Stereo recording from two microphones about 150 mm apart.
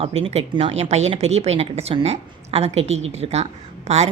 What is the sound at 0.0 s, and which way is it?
Speech, 45° right (ahead or behind).